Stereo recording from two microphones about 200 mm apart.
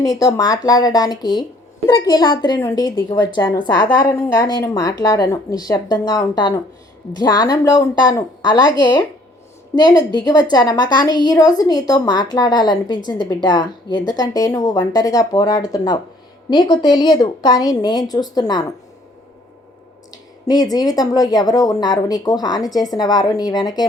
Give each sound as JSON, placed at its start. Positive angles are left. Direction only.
{"t": 0.0, "sound": "speech", "side_deg": 15}
{"t": 20.5, "sound": "speech", "side_deg": 20}